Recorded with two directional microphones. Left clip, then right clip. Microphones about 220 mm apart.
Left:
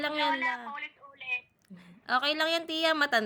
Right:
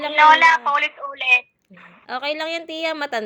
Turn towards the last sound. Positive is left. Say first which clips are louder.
# right 2 dB
turn(degrees=15)  # may be behind; listen again after turning